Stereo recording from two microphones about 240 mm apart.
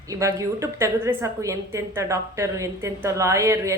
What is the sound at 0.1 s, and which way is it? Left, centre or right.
A woman's voice, centre.